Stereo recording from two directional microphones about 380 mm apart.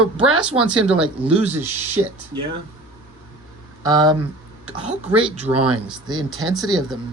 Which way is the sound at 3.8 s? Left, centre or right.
Centre.